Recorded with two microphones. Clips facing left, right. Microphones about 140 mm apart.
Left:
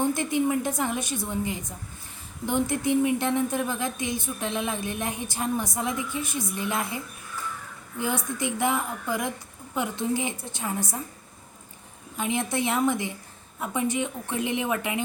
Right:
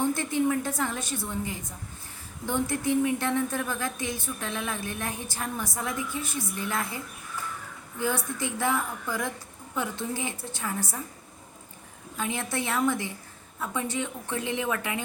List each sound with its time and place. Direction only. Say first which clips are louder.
0.0 s a woman's voice: left 1 dB; 15° left (ahead or behind)
12.1 s a woman's voice: left 3 dB; 20° left (ahead or behind)